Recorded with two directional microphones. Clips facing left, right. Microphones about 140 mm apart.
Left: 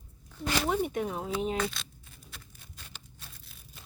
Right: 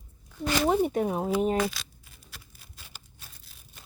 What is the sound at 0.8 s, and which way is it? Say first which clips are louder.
Speech: right 5 dB; 35° right (ahead or behind).